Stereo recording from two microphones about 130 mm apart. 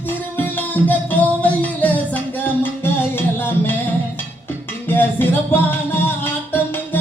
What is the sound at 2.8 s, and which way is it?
Music, 15° left (ahead or behind).